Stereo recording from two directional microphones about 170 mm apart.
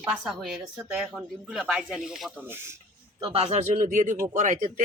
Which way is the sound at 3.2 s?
35° right (ahead or behind).